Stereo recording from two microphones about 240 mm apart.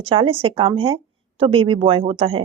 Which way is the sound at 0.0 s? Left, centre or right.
Right.